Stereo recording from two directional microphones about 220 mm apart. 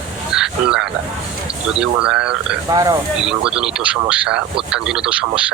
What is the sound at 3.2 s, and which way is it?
Speech, 5° right (ahead or behind).